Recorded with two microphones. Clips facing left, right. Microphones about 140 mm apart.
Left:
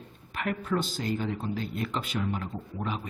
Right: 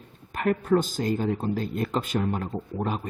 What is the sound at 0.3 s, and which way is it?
Speech, 45° right (ahead or behind).